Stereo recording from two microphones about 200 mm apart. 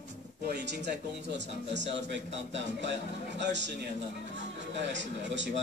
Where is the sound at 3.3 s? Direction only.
60° right (ahead or behind).